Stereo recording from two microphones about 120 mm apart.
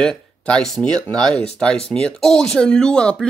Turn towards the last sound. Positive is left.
turn(degrees=5)  # may be behind; listen again after turning